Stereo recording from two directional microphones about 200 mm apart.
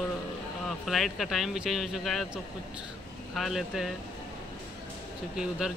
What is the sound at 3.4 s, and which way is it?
Speech, centre (ahead or behind).